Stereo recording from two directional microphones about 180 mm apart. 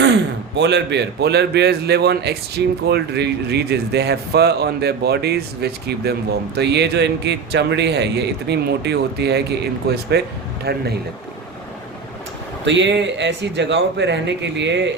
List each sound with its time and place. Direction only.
0.0 s a man's voice: 75° right (ahead or behind)
12.6 s a man's voice: 80° right